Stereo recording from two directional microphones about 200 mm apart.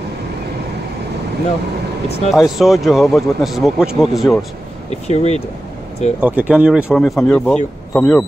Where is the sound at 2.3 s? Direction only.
Centre (ahead or behind).